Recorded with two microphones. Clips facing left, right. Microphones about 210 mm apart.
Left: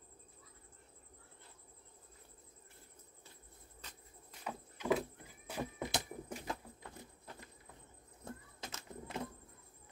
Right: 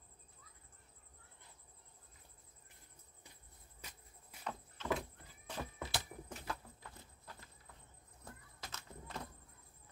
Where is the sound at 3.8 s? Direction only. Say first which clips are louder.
Even; 10° right (ahead or behind).